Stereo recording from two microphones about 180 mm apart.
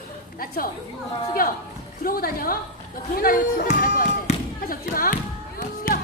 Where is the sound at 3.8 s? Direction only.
50° left (ahead or behind).